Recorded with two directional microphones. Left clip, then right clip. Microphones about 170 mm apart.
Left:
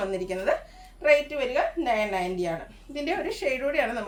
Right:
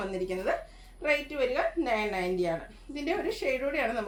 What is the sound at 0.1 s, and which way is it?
A woman's voice, 10° left (ahead or behind).